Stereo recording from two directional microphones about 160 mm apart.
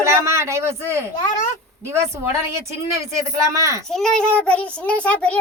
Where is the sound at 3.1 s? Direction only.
20° right (ahead or behind).